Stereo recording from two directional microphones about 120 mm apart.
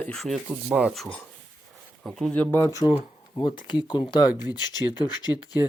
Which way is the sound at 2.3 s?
10° left (ahead or behind).